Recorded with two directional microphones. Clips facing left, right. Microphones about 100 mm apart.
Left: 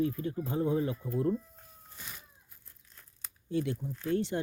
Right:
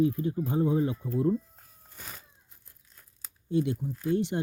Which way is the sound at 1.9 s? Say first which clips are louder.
Right 3 dB; 40° right (ahead or behind).